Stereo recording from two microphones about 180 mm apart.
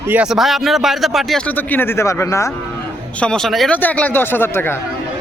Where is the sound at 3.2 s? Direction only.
5° left (ahead or behind).